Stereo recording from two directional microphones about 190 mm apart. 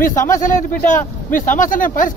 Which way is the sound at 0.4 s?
45° left (ahead or behind).